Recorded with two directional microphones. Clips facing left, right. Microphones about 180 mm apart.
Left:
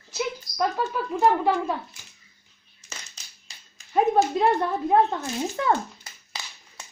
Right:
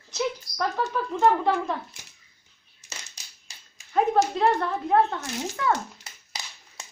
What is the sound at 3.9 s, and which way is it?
Speech, 15° left (ahead or behind).